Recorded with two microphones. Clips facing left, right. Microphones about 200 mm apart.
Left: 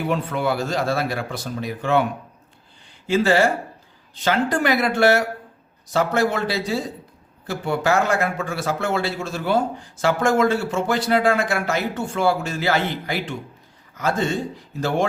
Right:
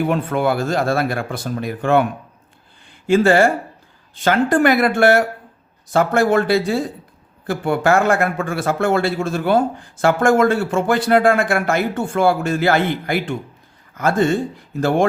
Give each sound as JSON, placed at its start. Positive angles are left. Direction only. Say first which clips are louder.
{"t": 0.0, "sound": "a man's voice", "louder": "right 4 dB", "side_deg": -50}
{"t": 3.1, "sound": "a man's voice", "louder": "right 4 dB", "side_deg": -50}